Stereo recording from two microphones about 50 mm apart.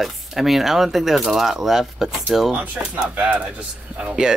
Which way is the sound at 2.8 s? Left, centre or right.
Right.